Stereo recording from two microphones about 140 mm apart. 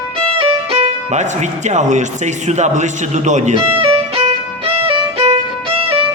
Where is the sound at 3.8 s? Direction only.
45° right (ahead or behind).